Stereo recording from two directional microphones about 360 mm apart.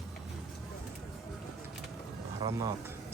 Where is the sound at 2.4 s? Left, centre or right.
Centre.